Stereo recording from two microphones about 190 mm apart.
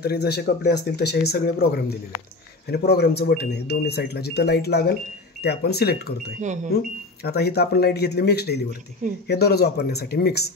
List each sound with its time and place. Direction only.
0.0 s speech: 55° left (ahead or behind)
6.4 s speech: 40° right (ahead or behind)
7.2 s speech: 55° left (ahead or behind)